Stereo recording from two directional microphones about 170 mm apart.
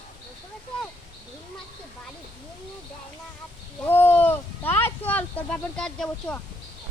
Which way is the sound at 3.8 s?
10° left (ahead or behind).